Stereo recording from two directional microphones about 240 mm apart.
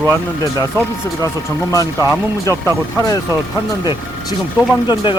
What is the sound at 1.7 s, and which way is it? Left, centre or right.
Speech, centre.